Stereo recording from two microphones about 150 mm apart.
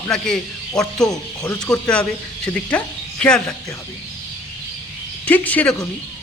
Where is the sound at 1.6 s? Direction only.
5° left (ahead or behind).